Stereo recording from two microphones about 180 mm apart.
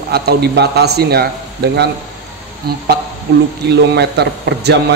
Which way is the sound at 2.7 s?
60° right (ahead or behind).